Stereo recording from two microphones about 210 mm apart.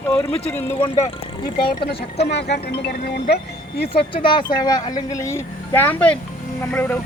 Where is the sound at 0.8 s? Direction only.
30° left (ahead or behind).